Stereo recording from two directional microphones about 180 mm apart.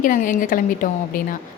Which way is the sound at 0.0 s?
50° left (ahead or behind).